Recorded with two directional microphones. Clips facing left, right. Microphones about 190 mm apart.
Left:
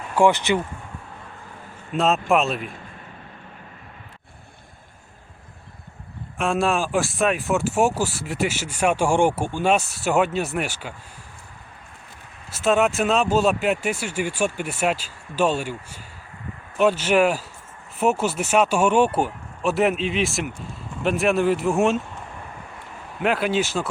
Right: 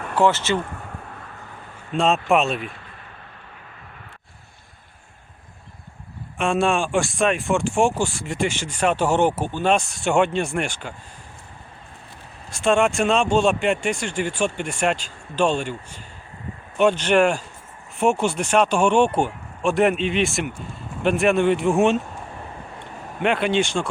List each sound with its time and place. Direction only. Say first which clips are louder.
0.2 s speech: left 1 dB; 15° left (ahead or behind)
1.9 s speech: right 1 dB; 5° left (ahead or behind)
6.3 s speech: right 1 dB; centre (ahead or behind)
12.5 s speech: right 1 dB; 5° left (ahead or behind)
23.2 s speech: right 1 dB; 5° left (ahead or behind)